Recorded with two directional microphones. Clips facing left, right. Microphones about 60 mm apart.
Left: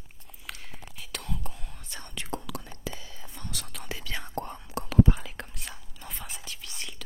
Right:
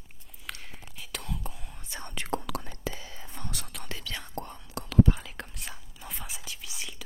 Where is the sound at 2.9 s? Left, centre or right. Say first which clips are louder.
Right 2 dB; right.